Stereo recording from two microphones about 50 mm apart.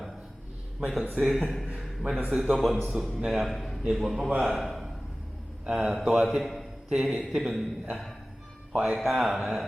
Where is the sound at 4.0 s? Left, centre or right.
Centre.